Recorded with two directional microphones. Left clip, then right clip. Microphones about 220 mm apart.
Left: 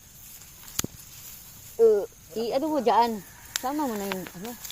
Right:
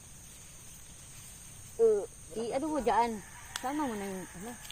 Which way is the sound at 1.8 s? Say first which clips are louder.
Left 7 dB; 30° left (ahead or behind).